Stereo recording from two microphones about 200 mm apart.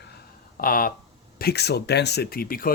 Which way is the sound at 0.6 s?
45° left (ahead or behind).